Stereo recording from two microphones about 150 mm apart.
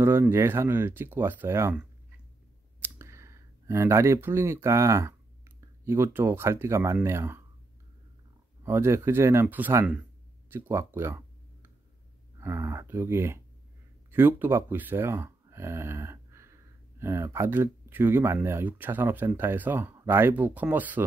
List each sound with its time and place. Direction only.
0.0 s speech: 15° right (ahead or behind)
8.6 s speech: 15° right (ahead or behind)
10.5 s a sound: 15° right (ahead or behind)
12.4 s speech: 15° right (ahead or behind)